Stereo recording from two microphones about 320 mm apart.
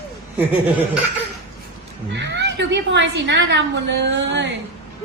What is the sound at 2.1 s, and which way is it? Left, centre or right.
A woman's voice, right.